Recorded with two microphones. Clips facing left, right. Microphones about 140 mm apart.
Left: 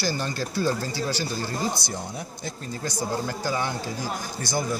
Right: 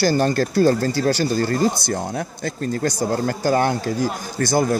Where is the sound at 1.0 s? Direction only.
75° right (ahead or behind); by 4.8 s 50° right (ahead or behind).